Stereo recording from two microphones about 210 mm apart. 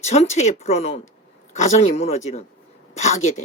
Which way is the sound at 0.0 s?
30° left (ahead or behind).